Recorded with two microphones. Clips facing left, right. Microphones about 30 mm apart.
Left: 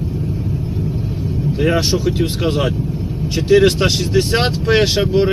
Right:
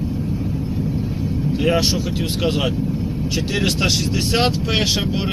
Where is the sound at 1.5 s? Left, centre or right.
Left.